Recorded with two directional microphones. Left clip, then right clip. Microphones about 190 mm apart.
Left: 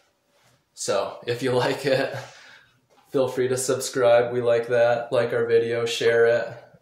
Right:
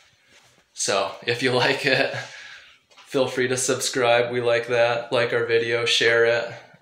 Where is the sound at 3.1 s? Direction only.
5° right (ahead or behind).